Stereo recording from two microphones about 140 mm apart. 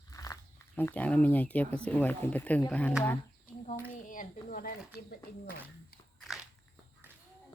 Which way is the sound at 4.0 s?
75° left (ahead or behind).